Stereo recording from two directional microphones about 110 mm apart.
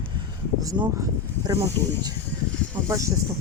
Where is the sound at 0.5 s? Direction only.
35° right (ahead or behind).